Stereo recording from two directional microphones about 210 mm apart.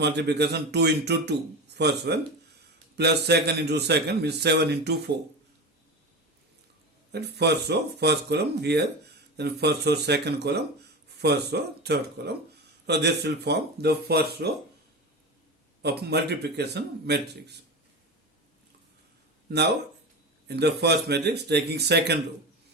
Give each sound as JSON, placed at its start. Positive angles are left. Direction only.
{"t": 0.0, "sound": "a man's voice", "side_deg": -55}
{"t": 7.1, "sound": "a man's voice", "side_deg": -50}
{"t": 15.8, "sound": "a man's voice", "side_deg": -50}
{"t": 20.5, "sound": "a man's voice", "side_deg": -50}